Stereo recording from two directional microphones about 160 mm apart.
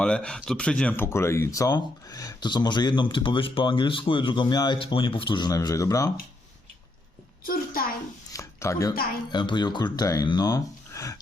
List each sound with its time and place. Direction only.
0.0 s speech: 5° left (ahead or behind)
7.4 s a child's voice: 65° left (ahead or behind)
8.3 s a sound: 20° left (ahead or behind)
9.3 s speech: 25° left (ahead or behind)